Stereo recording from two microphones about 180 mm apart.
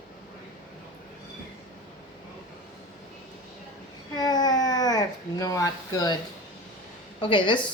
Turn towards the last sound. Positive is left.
turn(degrees=25)  # may be behind; listen again after turning